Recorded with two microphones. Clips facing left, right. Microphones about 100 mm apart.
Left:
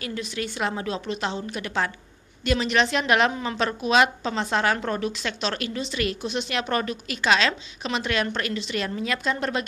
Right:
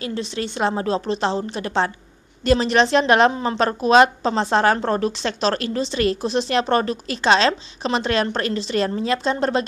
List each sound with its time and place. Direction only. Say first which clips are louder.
0.0 s a woman's voice: right 4 dB; 30° right (ahead or behind)